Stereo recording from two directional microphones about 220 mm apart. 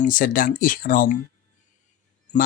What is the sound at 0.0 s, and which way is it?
Speech, 40° left (ahead or behind).